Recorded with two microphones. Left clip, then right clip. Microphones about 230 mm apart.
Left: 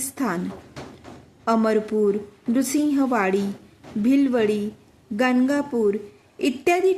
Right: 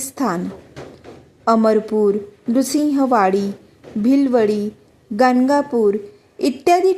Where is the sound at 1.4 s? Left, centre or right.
Centre.